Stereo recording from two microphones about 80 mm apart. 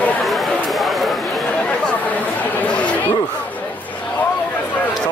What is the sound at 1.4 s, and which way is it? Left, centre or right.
Chatter, centre.